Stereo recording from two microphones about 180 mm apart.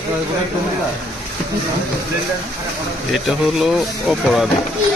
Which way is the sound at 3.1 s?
Centre (ahead or behind).